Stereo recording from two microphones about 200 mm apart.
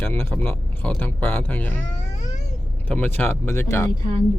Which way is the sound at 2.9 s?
10° left (ahead or behind).